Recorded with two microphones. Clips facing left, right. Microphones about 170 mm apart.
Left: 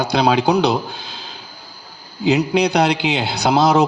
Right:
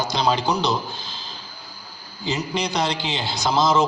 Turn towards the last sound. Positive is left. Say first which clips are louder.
# left 5 dB
turn(degrees=65)  # may be behind; listen again after turning